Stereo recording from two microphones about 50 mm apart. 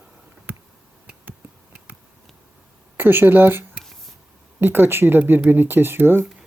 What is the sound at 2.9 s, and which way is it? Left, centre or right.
Speech, right.